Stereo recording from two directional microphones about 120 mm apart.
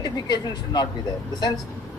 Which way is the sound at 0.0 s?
35° left (ahead or behind).